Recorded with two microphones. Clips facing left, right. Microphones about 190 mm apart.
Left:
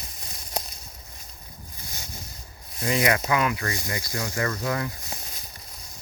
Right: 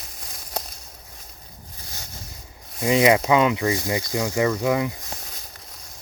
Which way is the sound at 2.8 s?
20° right (ahead or behind).